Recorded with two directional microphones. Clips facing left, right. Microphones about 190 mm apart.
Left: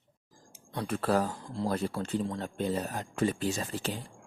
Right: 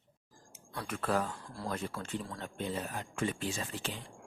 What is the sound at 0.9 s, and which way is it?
Speech, 35° left (ahead or behind).